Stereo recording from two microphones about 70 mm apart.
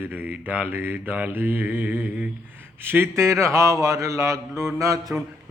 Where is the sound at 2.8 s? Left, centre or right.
Right.